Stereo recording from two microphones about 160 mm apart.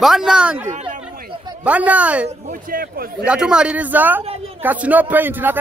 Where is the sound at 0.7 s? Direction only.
50° right (ahead or behind).